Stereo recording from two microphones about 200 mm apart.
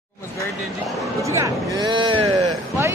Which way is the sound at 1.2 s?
15° right (ahead or behind).